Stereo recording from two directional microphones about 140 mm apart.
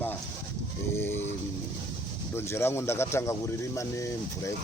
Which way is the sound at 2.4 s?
20° left (ahead or behind).